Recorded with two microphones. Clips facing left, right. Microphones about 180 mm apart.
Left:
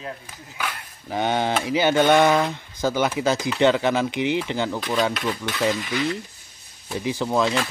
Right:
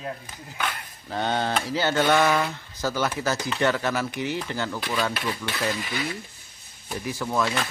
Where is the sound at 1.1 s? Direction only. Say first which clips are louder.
Left 3 dB; 15° left (ahead or behind).